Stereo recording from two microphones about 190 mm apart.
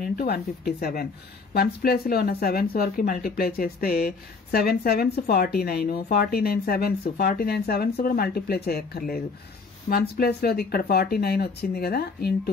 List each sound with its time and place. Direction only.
0.0 s a woman's voice: 55° left (ahead or behind)